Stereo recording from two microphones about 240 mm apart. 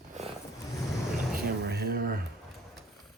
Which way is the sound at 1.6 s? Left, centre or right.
Right.